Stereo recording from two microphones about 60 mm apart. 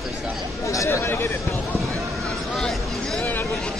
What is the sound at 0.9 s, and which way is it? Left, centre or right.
Speech, left.